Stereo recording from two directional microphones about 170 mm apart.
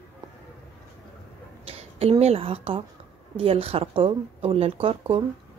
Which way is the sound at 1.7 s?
35° right (ahead or behind).